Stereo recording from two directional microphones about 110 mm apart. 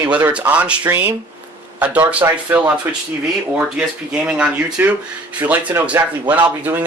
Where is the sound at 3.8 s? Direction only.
10° right (ahead or behind).